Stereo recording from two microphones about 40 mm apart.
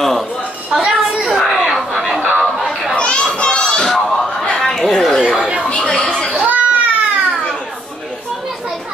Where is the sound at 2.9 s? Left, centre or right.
Left.